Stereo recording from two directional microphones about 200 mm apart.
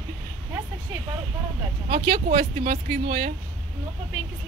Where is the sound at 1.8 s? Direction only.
35° right (ahead or behind).